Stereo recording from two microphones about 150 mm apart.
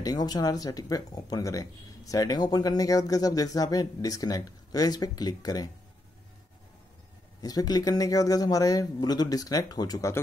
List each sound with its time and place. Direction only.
0.0 s speech: 25° left (ahead or behind)
7.4 s speech: 25° left (ahead or behind)